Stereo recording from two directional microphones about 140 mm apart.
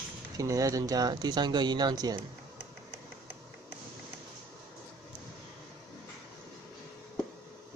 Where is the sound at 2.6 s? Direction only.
15° right (ahead or behind).